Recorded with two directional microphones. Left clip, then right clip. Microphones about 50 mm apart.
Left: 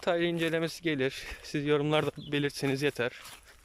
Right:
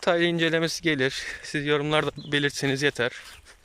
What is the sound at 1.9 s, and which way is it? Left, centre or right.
Speech, left.